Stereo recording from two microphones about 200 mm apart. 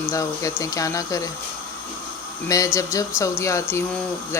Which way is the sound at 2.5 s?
15° left (ahead or behind).